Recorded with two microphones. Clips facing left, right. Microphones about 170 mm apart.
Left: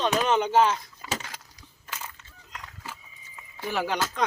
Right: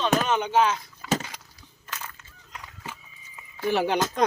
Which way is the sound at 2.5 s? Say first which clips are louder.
Right 1 dB; 5° right (ahead or behind).